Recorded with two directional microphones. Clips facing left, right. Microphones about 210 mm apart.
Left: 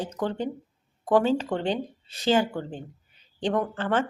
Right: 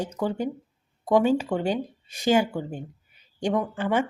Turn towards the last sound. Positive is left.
turn(degrees=-10)  # may be behind; listen again after turning